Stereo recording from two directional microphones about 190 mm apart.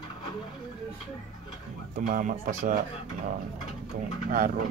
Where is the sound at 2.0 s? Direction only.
45° right (ahead or behind).